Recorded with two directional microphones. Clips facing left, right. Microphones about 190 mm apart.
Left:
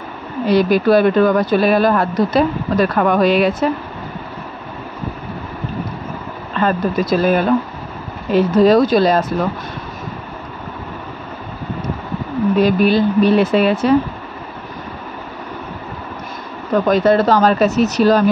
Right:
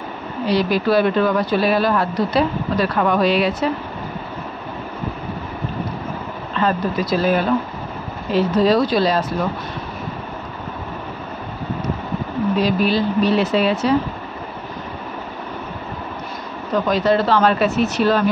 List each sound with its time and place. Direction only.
0.5 s speech: 50° left (ahead or behind)
6.6 s speech: 50° left (ahead or behind)
8.5 s speech: 50° left (ahead or behind)
12.5 s speech: 55° left (ahead or behind)
16.8 s speech: 50° left (ahead or behind)